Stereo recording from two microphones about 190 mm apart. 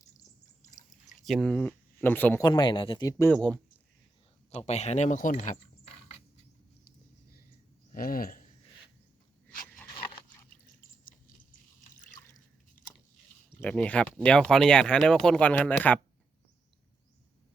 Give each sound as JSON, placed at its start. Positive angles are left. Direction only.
{"t": 0.6, "sound": "a sound", "side_deg": 40}
{"t": 1.2, "sound": "speech", "side_deg": 0}
{"t": 2.4, "sound": "speech", "side_deg": 25}
{"t": 3.1, "sound": "speech", "side_deg": 15}
{"t": 4.5, "sound": "speech", "side_deg": 35}
{"t": 7.9, "sound": "speech", "side_deg": 50}
{"t": 11.9, "sound": "drip", "side_deg": 40}
{"t": 13.6, "sound": "speech", "side_deg": 5}